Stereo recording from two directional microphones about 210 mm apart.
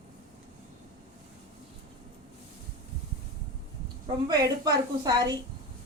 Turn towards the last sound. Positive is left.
turn(degrees=-20)  # may be behind; listen again after turning